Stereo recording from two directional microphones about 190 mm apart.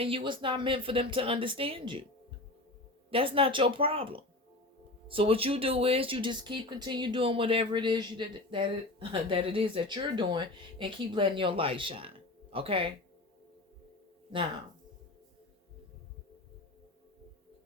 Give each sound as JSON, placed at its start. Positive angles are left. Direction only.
{"t": 0.0, "sound": "speech", "side_deg": -25}
{"t": 3.1, "sound": "speech", "side_deg": -30}